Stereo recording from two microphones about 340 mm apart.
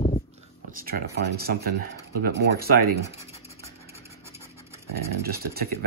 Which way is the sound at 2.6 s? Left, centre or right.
Right.